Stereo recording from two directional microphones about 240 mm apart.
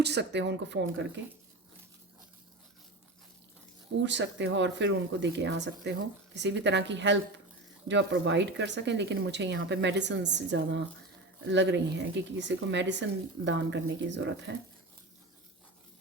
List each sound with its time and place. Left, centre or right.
0.0 s speech: right
4.0 s speech: right